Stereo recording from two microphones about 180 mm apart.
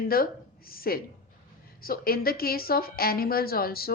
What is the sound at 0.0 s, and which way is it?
Speech, 55° left (ahead or behind).